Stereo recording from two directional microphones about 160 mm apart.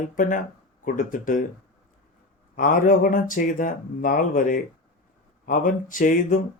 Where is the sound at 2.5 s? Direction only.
55° left (ahead or behind).